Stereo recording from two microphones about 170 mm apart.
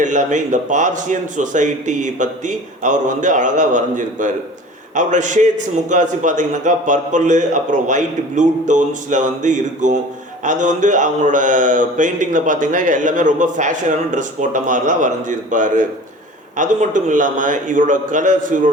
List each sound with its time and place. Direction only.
0.0 s a man's voice: 45° right (ahead or behind)